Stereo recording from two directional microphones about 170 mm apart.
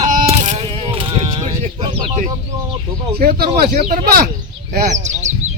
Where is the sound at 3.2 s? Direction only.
65° right (ahead or behind).